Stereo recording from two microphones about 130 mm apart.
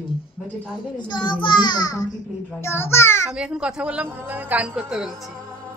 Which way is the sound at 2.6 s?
20° left (ahead or behind).